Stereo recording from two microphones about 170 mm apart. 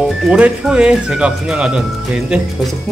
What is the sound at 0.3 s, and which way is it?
Speech, 5° right (ahead or behind).